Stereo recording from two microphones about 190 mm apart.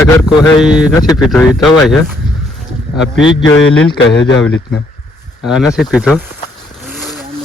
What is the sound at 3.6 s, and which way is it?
Speech, 90° left.